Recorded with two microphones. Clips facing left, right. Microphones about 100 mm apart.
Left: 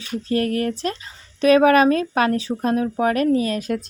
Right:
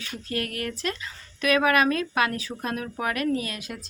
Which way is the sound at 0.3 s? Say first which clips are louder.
Left 10 dB; 35° left (ahead or behind).